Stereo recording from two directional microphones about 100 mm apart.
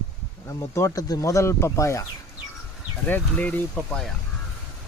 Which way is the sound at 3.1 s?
15° left (ahead or behind).